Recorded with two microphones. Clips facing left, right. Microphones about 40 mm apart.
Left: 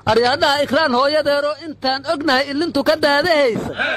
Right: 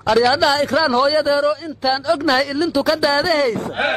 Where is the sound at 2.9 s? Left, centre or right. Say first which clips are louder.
Left 2 dB; left.